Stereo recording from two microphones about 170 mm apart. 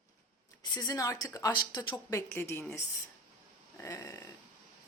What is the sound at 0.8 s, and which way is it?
A woman's voice, 20° left (ahead or behind).